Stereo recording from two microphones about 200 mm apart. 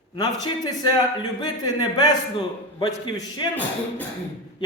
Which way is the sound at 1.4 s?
20° left (ahead or behind).